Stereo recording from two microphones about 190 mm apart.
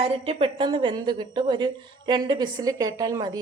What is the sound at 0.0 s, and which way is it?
A woman's voice, 30° right (ahead or behind).